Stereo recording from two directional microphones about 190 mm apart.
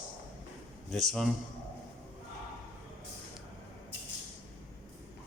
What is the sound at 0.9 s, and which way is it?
Speech, centre (ahead or behind).